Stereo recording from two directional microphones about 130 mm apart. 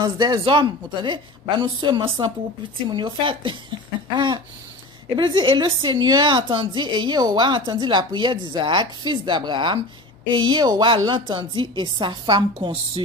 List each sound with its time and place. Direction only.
0.0 s a woman's voice: 30° right (ahead or behind)
5.1 s a woman's voice: 40° right (ahead or behind)